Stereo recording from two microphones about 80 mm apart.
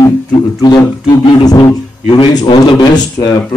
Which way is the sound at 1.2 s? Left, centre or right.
Left.